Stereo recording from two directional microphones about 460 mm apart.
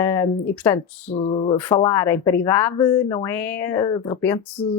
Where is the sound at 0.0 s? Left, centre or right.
Centre.